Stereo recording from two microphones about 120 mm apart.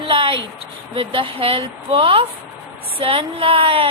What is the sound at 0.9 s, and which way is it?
A woman's voice, 50° right (ahead or behind).